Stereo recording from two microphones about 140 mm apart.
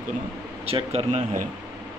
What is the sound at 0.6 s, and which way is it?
Speech, 45° right (ahead or behind).